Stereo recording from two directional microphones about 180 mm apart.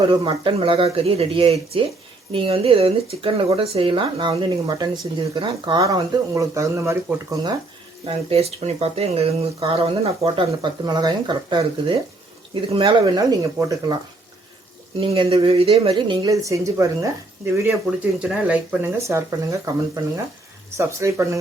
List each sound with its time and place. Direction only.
0.1 s speech: 25° right (ahead or behind)
8.0 s speech: 35° right (ahead or behind); by 13.9 s 20° right (ahead or behind)
15.1 s speech: 30° right (ahead or behind)